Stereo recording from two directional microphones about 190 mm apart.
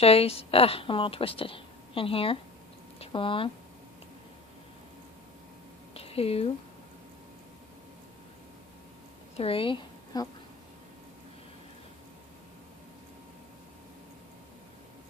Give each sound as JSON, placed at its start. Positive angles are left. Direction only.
{"t": 0.0, "sound": "a woman's voice", "side_deg": 30}
{"t": 5.9, "sound": "a sound", "side_deg": 30}
{"t": 9.3, "sound": "a woman's voice", "side_deg": 30}